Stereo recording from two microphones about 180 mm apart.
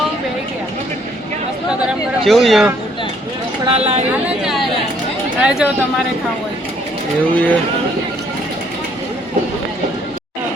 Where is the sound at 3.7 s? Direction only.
35° right (ahead or behind).